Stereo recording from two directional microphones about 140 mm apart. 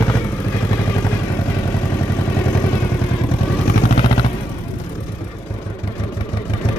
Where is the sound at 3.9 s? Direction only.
40° left (ahead or behind).